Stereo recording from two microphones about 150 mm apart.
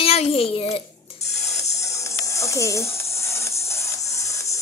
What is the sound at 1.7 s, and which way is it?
Music, 20° left (ahead or behind).